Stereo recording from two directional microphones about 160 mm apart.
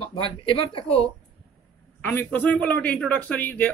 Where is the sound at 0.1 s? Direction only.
35° left (ahead or behind).